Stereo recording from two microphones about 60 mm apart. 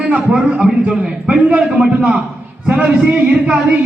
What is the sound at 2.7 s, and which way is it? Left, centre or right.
Speech, centre.